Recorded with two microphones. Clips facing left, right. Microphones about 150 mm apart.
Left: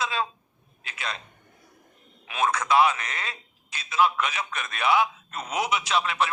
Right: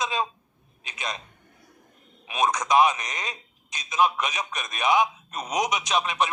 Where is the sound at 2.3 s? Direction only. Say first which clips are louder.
Right 1 dB; 15° right (ahead or behind).